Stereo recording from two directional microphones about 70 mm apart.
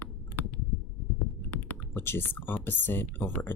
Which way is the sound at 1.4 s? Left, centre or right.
Left.